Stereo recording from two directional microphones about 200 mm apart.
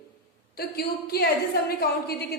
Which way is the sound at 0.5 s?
50° left (ahead or behind).